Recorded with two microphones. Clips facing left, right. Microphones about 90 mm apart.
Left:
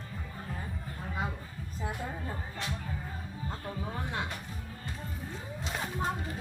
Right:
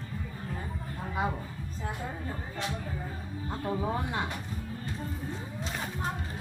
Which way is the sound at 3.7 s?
30° right (ahead or behind).